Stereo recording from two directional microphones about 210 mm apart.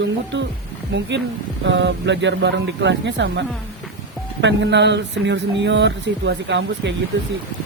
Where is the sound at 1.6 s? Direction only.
60° right (ahead or behind).